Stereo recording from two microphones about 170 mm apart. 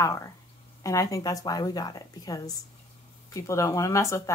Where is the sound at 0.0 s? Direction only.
20° left (ahead or behind).